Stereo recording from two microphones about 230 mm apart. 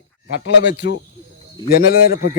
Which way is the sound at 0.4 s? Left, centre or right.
Left.